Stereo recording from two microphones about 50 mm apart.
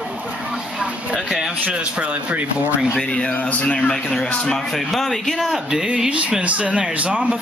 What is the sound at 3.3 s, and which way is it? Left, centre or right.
Speech, left.